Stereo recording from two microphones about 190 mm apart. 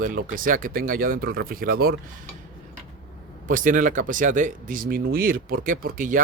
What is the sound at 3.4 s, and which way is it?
Speech, 45° right (ahead or behind).